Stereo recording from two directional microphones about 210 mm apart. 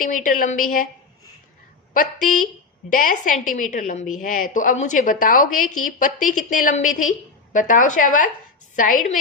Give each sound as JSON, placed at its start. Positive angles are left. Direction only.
{"t": 0.0, "sound": "a woman's voice", "side_deg": 40}
{"t": 1.9, "sound": "a woman's voice", "side_deg": 40}